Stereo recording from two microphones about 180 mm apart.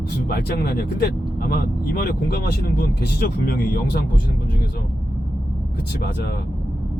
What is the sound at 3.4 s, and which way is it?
Speech, 60° left (ahead or behind).